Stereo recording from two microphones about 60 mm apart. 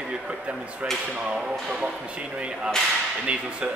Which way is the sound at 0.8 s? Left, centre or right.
Right.